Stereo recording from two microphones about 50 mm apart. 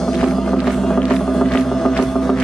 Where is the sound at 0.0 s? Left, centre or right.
Centre.